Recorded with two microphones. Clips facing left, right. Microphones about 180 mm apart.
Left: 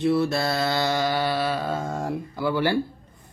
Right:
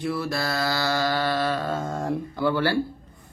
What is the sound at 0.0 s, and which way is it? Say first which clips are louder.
Mantra: left 5 dB; 25° left (ahead or behind).